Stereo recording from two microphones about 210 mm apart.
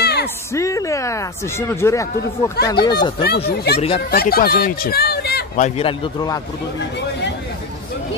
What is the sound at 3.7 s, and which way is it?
Speech, 30° left (ahead or behind).